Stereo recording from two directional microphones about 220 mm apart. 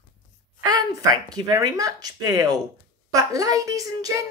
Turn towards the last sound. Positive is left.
turn(degrees=-15)  # may be behind; listen again after turning